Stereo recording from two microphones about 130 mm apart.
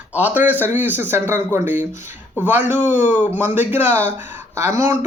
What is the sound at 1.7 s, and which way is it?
Speech, 70° left (ahead or behind).